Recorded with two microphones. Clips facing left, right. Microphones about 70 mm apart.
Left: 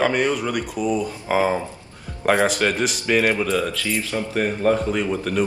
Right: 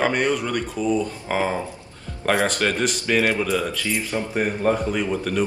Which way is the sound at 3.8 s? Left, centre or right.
Right.